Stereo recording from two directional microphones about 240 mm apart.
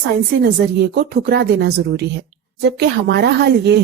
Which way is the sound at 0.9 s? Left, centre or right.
Right.